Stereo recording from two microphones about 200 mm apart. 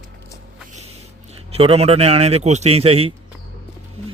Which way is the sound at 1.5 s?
30° right (ahead or behind).